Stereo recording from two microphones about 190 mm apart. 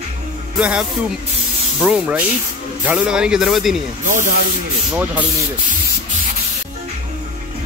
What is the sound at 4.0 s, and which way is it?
Speech, 40° right (ahead or behind).